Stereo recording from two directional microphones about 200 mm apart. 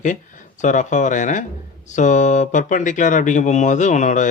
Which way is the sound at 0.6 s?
40° left (ahead or behind).